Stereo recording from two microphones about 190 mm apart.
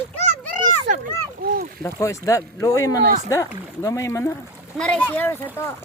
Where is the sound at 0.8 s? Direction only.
45° right (ahead or behind).